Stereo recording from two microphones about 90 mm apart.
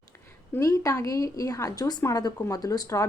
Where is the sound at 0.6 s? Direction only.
40° left (ahead or behind).